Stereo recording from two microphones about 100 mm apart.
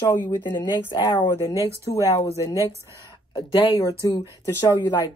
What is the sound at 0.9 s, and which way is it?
Speech, 40° left (ahead or behind).